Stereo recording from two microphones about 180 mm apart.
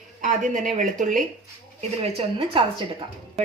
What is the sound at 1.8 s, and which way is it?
Speech, 35° right (ahead or behind).